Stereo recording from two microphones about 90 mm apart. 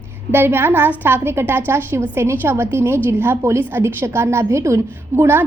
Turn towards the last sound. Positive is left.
turn(degrees=-25)  # may be behind; listen again after turning